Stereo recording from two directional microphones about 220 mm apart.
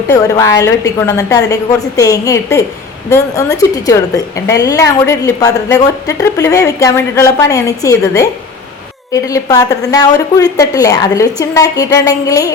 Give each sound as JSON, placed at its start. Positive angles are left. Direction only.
{"t": 0.1, "sound": "a woman's voice", "side_deg": 15}